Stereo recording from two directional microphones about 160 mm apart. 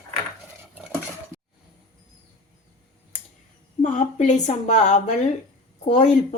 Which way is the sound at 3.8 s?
50° left (ahead or behind).